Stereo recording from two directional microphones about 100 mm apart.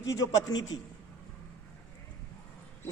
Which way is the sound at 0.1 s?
40° left (ahead or behind).